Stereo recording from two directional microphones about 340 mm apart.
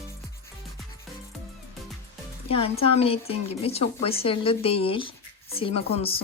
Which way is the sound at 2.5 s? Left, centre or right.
Centre.